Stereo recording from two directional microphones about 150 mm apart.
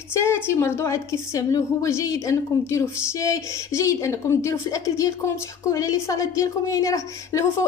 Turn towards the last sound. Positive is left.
turn(degrees=20)  # may be behind; listen again after turning